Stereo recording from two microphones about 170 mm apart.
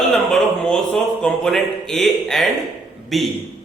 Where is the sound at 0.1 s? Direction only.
Centre (ahead or behind).